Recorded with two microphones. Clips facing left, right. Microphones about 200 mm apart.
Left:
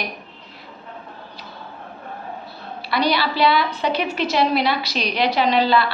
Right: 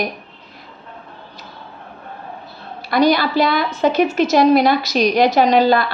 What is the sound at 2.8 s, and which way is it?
A woman's voice, 45° right (ahead or behind).